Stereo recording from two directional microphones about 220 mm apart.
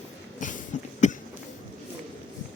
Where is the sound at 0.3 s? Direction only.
35° left (ahead or behind).